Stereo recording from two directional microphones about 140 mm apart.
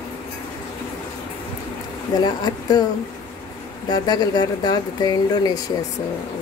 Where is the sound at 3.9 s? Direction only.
30° left (ahead or behind).